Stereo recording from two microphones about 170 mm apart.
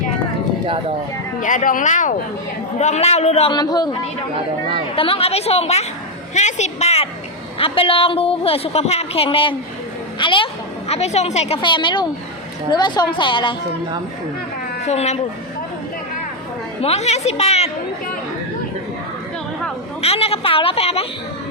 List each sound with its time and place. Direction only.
1.4 s a woman's voice: 50° left (ahead or behind)
3.5 s a woman's voice: 25° left (ahead or behind)
4.9 s a woman's voice: 35° left (ahead or behind)
14.8 s a woman's voice: 40° left (ahead or behind)
16.8 s a woman's voice: 40° left (ahead or behind)
20.0 s a woman's voice: 35° left (ahead or behind)